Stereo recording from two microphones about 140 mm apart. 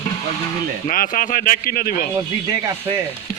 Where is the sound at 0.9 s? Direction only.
75° left (ahead or behind).